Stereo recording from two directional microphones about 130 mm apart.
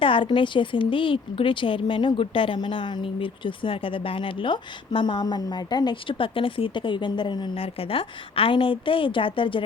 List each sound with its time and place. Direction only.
0.0 s a woman's voice: 40° left (ahead or behind)